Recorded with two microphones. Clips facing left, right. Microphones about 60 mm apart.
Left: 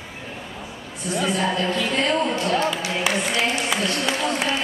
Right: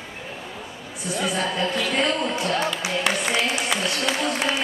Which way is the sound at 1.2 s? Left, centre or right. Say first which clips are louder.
Left 2 dB; centre.